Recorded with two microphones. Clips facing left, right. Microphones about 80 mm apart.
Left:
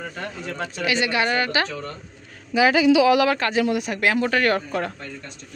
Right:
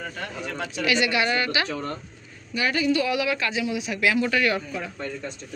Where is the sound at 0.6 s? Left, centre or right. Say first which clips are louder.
Even; left.